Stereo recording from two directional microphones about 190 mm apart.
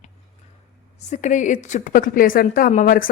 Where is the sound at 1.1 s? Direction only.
40° left (ahead or behind).